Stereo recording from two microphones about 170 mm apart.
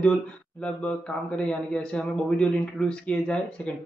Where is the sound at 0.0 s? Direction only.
5° left (ahead or behind).